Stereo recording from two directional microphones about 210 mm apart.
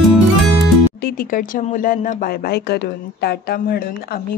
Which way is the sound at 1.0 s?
45° left (ahead or behind).